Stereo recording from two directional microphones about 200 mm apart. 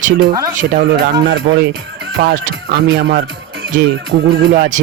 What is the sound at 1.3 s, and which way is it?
Speech, 60° right (ahead or behind).